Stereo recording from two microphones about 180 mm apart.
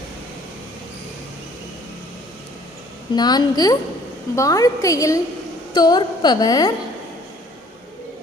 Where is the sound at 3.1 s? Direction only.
25° left (ahead or behind).